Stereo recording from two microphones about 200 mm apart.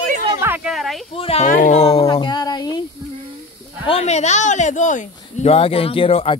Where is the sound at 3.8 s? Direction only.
30° left (ahead or behind).